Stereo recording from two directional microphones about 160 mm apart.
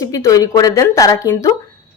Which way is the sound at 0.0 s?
20° left (ahead or behind).